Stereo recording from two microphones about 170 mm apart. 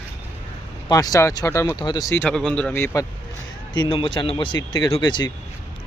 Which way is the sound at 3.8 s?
30° left (ahead or behind).